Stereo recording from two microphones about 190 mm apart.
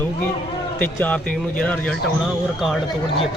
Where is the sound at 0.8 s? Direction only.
10° left (ahead or behind).